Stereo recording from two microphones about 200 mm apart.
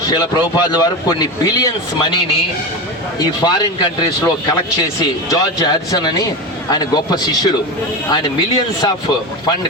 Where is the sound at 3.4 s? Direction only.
20° left (ahead or behind).